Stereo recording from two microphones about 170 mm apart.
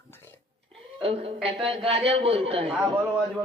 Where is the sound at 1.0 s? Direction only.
35° right (ahead or behind).